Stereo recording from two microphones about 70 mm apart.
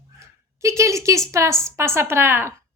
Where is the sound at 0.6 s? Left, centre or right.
Right.